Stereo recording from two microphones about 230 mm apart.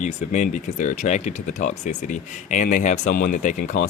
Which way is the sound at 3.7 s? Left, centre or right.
Left.